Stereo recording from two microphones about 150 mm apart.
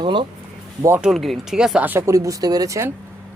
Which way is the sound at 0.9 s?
15° right (ahead or behind).